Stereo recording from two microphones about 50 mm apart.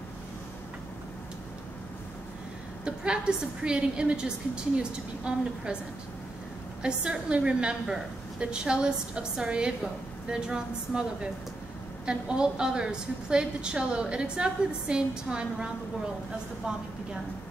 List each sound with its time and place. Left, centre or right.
2.8 s a woman's voice: centre
6.8 s a woman's voice: centre